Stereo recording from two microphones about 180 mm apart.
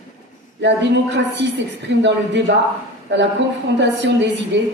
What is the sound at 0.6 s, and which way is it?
A woman's voice, 75° right (ahead or behind).